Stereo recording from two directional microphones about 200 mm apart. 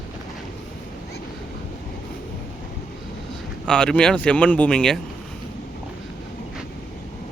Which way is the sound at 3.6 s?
5° left (ahead or behind).